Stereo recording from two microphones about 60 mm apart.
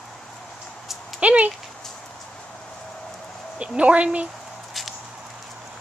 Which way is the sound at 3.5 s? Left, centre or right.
Centre.